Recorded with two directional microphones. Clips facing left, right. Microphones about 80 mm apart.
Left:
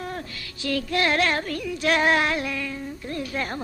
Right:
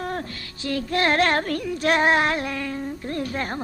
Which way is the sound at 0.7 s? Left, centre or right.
Right.